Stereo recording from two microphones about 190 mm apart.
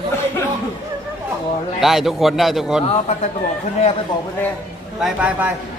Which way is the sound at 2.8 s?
35° left (ahead or behind).